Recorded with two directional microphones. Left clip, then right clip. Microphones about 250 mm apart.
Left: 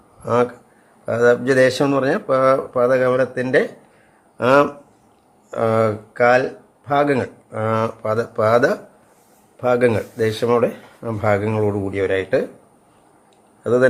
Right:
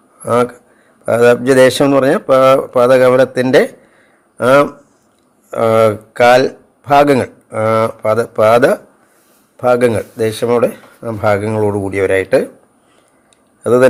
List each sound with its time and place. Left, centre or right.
0.2 s speech: centre
4.4 s speech: centre